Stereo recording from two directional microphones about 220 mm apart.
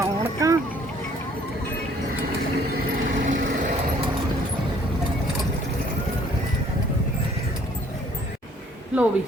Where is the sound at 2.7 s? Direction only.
35° right (ahead or behind).